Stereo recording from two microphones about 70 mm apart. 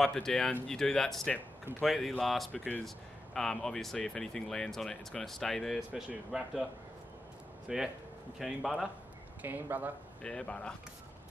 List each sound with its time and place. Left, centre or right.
0.0 s speech: centre
7.6 s speech: centre
9.4 s speech: right
10.2 s speech: centre